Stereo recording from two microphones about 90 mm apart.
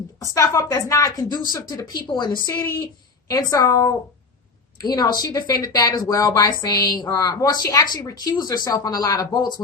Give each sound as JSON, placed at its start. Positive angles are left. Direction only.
{"t": 0.3, "sound": "a woman's voice", "side_deg": 35}
{"t": 1.3, "sound": "speech", "side_deg": 50}
{"t": 3.5, "sound": "a woman's voice", "side_deg": 35}
{"t": 4.8, "sound": "speech", "side_deg": 45}